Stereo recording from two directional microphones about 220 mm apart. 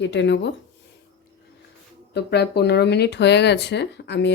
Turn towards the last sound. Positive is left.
turn(degrees=50)  # may be behind; listen again after turning